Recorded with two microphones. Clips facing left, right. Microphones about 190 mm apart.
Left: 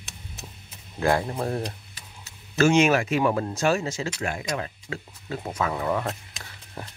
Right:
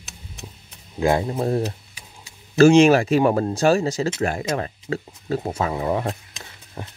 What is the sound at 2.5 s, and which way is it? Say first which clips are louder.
Speech: right 7 dB; 35° right (ahead or behind).